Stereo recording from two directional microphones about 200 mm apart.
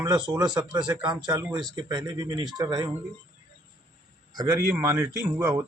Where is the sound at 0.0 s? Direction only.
20° right (ahead or behind).